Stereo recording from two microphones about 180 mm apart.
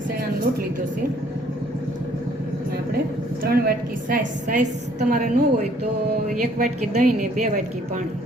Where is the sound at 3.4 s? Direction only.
55° right (ahead or behind).